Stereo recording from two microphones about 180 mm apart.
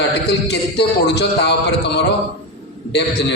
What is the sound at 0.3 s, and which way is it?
A man's voice, 65° left (ahead or behind).